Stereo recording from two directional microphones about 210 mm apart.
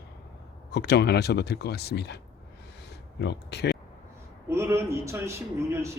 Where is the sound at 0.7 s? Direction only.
50° left (ahead or behind).